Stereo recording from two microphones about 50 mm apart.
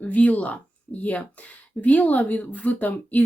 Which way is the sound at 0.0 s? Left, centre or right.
Left.